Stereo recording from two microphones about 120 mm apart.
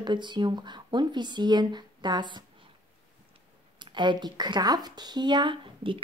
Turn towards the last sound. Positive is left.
turn(degrees=-45)  # may be behind; listen again after turning